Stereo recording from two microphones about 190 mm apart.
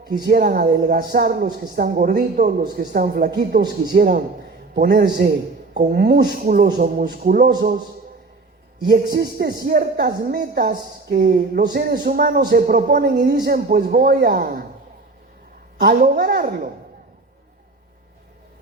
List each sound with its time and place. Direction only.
0.1 s a man's voice: 55° right (ahead or behind)
9.1 s a man's voice: 50° right (ahead or behind)
11.2 s speech: 60° right (ahead or behind)
12.0 s a man's voice: 50° right (ahead or behind)
16.0 s a man's voice: 50° right (ahead or behind)